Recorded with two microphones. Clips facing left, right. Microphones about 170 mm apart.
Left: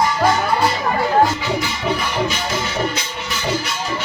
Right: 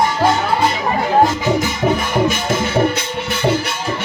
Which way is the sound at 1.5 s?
50° right (ahead or behind).